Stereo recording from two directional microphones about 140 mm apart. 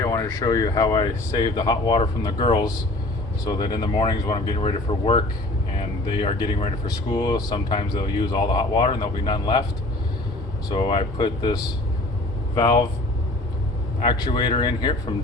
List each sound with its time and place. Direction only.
0.0 s speech: 25° left (ahead or behind)
6.8 s speech: 30° left (ahead or behind)
10.7 s speech: 35° left (ahead or behind)
14.0 s speech: 35° left (ahead or behind)